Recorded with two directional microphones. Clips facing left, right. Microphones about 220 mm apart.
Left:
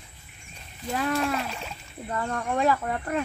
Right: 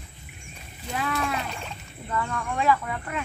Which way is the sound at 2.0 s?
40° left (ahead or behind).